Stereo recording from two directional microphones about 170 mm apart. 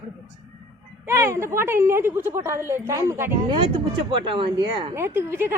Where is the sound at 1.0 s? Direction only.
15° right (ahead or behind).